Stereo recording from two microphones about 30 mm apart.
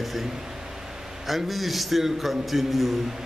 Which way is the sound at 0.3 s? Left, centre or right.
Centre.